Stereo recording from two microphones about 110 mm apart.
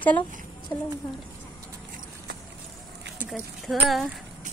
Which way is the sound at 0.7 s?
35° left (ahead or behind).